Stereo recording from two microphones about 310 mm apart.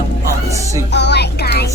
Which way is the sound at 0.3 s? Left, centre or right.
Centre.